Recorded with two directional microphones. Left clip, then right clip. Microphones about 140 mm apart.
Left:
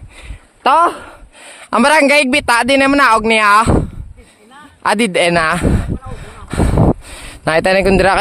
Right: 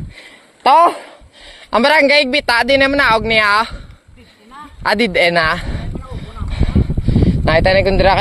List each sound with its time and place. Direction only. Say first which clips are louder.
0.7 s speech: right 1 dB; 25° left (ahead or behind)
1.4 s speech: left 1 dB; 45° left (ahead or behind)
4.8 s speech: even; 45° left (ahead or behind)
7.1 s speech: right 2 dB; 65° left (ahead or behind)